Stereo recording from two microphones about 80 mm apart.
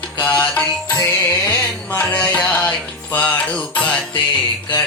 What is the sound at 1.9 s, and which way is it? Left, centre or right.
Music, centre.